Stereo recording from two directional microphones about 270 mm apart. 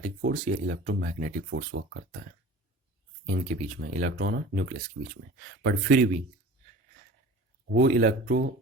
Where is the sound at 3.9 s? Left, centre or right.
Right.